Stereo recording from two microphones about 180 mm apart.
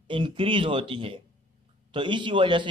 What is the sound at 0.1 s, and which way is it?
A man's voice, 25° right (ahead or behind).